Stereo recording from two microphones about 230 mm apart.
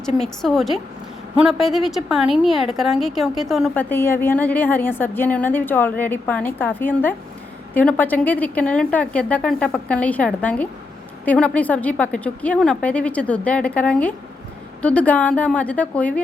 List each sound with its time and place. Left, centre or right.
0.2 s a woman's voice: centre